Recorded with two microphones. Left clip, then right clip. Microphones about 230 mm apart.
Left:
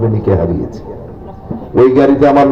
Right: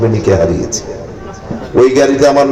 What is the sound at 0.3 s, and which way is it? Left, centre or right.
Speech, right.